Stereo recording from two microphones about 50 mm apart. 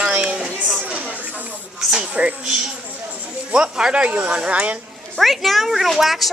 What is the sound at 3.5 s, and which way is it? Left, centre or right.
Speech, centre.